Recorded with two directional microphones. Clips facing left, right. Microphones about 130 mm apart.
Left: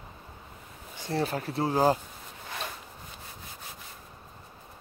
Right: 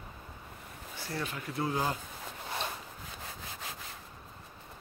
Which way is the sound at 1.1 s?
35° left (ahead or behind).